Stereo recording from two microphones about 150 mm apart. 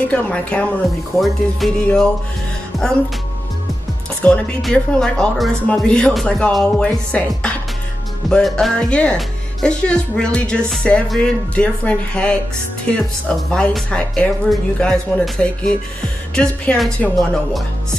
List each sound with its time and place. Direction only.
0.1 s speech: 10° left (ahead or behind)
2.7 s music: centre (ahead or behind)
4.2 s speech: 5° left (ahead or behind)